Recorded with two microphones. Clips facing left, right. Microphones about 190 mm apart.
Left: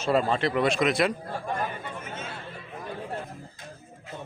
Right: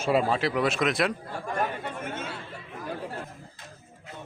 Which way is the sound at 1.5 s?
65° right (ahead or behind).